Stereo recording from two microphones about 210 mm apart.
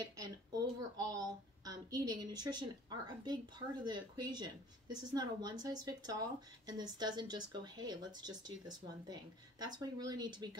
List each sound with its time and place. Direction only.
0.0 s a woman's voice: 15° right (ahead or behind)